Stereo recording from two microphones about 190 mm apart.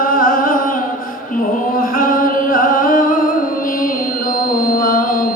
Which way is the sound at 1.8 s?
45° left (ahead or behind).